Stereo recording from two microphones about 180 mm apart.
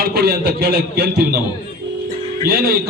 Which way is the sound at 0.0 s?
60° right (ahead or behind).